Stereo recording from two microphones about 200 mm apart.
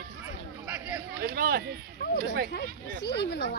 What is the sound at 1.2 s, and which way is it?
Speech, 50° right (ahead or behind).